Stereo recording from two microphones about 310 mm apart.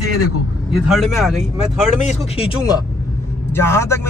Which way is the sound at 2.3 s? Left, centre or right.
Centre.